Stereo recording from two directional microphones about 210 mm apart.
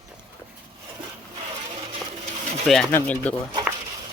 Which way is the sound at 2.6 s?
Centre (ahead or behind).